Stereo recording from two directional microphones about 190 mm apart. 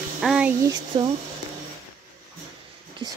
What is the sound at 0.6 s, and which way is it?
Speech, 20° right (ahead or behind).